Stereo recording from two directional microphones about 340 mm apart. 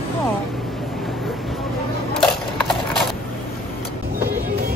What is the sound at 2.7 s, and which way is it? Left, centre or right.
Mechanisms, centre.